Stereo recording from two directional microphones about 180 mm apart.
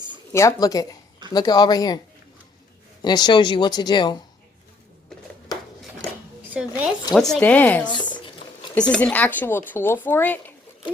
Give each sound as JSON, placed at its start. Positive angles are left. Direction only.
{"t": 0.3, "sound": "speech", "side_deg": 20}
{"t": 3.0, "sound": "speech", "side_deg": 25}
{"t": 6.5, "sound": "a woman's voice", "side_deg": -5}
{"t": 7.9, "sound": "a sound", "side_deg": 25}
{"t": 8.9, "sound": "a woman's voice", "side_deg": 5}